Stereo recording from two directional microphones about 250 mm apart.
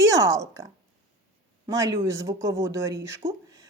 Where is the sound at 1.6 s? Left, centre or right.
Centre.